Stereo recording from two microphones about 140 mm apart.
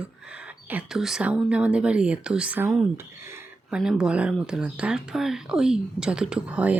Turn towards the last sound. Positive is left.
turn(degrees=-10)  # may be behind; listen again after turning